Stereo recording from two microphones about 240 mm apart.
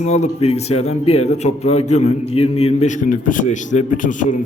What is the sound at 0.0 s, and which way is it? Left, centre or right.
A man's voice, left.